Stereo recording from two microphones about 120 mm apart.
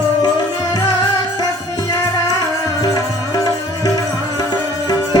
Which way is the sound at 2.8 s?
30° left (ahead or behind).